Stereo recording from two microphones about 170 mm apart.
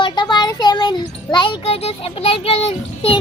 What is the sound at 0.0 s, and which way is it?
Child singing, 25° left (ahead or behind).